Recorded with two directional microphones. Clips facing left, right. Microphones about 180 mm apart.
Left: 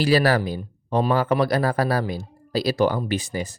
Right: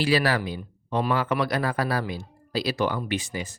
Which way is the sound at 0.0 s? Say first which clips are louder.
Left 4 dB; 40° left (ahead or behind).